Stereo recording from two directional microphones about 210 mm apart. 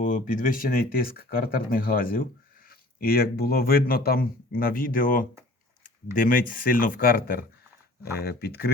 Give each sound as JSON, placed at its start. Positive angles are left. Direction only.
{"t": 0.0, "sound": "speech", "side_deg": 40}